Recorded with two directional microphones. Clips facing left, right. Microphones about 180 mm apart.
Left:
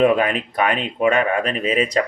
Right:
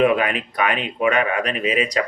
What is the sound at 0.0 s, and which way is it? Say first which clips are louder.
Speech: left 1 dB; 40° left (ahead or behind).